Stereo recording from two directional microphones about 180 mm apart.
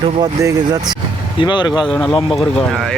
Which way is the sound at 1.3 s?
25° left (ahead or behind).